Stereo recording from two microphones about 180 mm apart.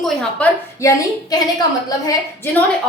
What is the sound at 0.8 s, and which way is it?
Speech, 20° left (ahead or behind).